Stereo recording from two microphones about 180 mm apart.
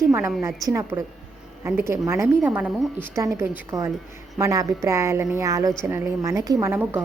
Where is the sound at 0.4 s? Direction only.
15° right (ahead or behind).